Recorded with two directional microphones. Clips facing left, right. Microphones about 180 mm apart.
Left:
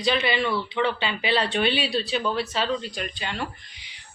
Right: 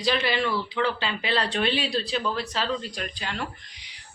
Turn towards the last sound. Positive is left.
turn(degrees=0)  # may be behind; listen again after turning